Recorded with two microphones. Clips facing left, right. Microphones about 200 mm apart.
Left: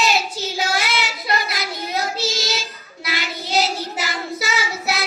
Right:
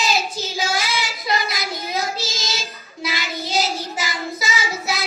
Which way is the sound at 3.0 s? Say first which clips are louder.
Right 1 dB; 65° left (ahead or behind).